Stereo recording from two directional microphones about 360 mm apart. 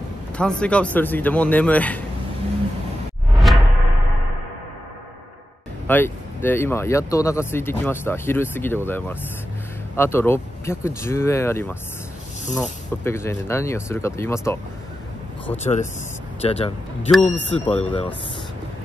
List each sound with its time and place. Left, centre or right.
0.4 s a man's voice: centre
3.3 s a sound: centre
5.9 s speech: centre
15.6 s speech: centre